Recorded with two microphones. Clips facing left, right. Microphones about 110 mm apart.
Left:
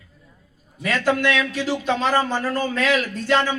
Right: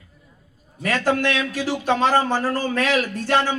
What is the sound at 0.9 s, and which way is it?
A man's voice, 30° right (ahead or behind).